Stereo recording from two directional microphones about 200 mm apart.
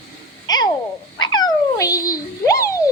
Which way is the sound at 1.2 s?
20° left (ahead or behind).